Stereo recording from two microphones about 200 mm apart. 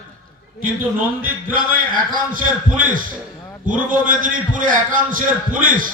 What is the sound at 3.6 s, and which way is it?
Speech, 40° right (ahead or behind).